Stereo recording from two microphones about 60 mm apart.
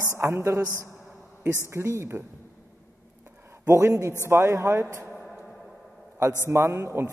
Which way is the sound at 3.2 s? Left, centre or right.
Right.